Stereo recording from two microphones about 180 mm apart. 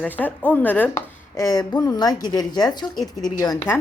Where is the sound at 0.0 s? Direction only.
10° left (ahead or behind).